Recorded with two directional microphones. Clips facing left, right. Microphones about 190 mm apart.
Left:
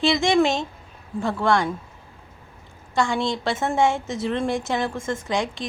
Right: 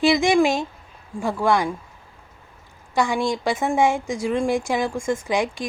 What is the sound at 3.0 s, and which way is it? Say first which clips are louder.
A woman's voice: right 1 dB; 15° right (ahead or behind).